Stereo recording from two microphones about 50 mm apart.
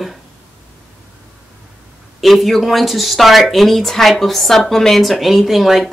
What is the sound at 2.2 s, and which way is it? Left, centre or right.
A woman's voice, centre.